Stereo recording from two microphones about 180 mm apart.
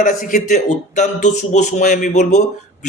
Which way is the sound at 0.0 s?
50° left (ahead or behind).